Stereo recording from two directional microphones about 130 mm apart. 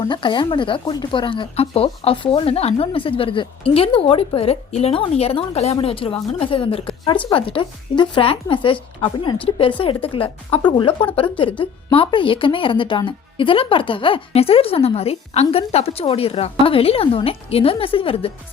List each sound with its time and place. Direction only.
0.0 s speech: 35° left (ahead or behind)